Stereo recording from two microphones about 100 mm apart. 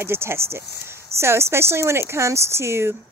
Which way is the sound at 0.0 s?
25° right (ahead or behind).